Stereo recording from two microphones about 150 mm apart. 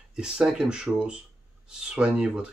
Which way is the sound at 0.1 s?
5° right (ahead or behind).